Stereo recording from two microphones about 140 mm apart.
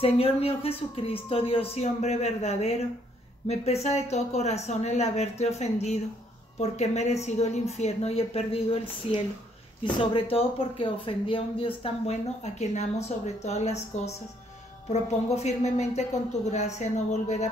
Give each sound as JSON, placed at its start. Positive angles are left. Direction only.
{"t": 0.0, "sound": "speech", "side_deg": 45}